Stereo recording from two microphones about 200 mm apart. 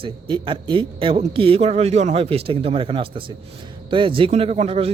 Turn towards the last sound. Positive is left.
turn(degrees=-30)  # may be behind; listen again after turning